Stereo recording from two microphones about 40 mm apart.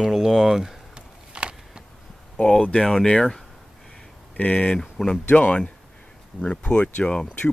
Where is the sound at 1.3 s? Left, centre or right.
Right.